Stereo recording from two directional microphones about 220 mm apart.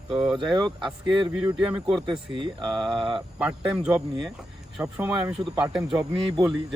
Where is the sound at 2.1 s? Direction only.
20° right (ahead or behind).